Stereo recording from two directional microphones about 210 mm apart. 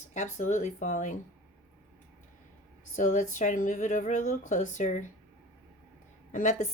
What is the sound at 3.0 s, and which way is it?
Speech, 35° left (ahead or behind).